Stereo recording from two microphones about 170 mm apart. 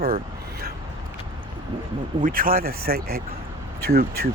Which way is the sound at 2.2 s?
55° right (ahead or behind).